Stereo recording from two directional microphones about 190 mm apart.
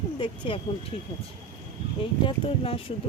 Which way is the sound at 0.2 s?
30° left (ahead or behind).